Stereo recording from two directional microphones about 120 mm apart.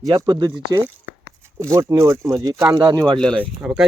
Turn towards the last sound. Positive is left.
turn(degrees=-10)  # may be behind; listen again after turning